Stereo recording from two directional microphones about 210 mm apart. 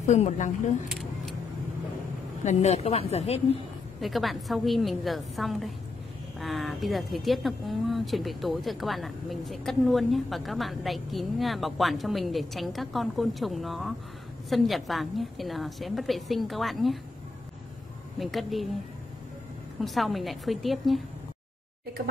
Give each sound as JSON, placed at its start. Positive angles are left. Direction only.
{"t": 0.0, "sound": "a woman's voice", "side_deg": 35}
{"t": 2.4, "sound": "a woman's voice", "side_deg": 30}
{"t": 4.0, "sound": "speech", "side_deg": 0}
{"t": 18.2, "sound": "speech", "side_deg": 0}
{"t": 19.8, "sound": "speech", "side_deg": 0}